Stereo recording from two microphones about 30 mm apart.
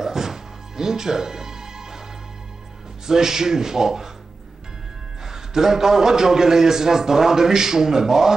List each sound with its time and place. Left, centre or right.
0.0 s music: centre
3.1 s speech: centre
5.2 s a man's voice: centre